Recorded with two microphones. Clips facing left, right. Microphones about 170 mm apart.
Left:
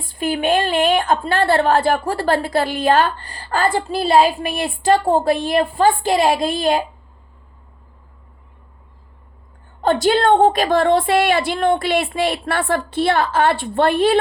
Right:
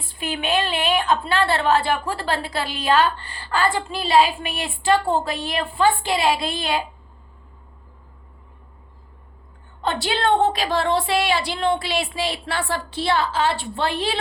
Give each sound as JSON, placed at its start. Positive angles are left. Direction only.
{"t": 0.0, "sound": "a woman's voice", "side_deg": 45}
{"t": 9.8, "sound": "a woman's voice", "side_deg": 45}